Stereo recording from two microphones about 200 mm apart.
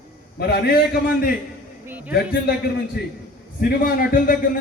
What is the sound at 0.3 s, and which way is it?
Speech, 55° left (ahead or behind).